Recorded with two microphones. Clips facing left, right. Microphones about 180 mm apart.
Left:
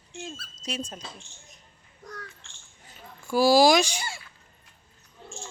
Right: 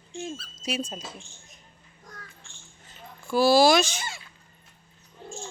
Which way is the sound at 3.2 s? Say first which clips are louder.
Even; 15° left (ahead or behind).